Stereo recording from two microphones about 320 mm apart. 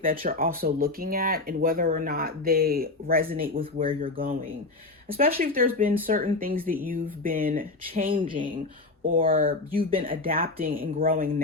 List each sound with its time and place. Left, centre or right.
0.0 s speech: right
9.1 s speech: right